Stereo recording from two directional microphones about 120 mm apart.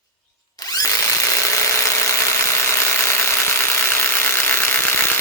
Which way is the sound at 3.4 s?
20° left (ahead or behind).